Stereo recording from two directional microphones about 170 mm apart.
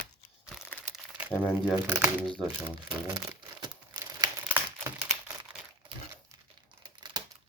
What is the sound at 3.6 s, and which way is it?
Tearing, 25° right (ahead or behind).